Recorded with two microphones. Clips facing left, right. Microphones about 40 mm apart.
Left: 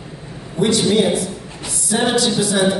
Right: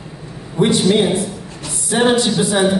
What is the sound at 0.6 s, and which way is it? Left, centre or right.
Speech, right.